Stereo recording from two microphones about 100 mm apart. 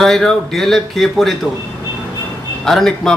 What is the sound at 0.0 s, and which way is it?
Speech, 5° left (ahead or behind).